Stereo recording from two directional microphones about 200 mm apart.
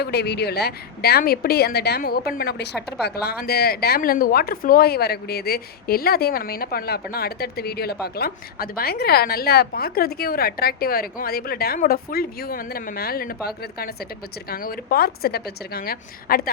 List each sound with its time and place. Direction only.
0.0 s a woman's voice: 55° left (ahead or behind)